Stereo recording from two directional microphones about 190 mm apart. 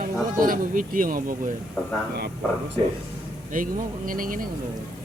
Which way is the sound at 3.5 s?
45° right (ahead or behind).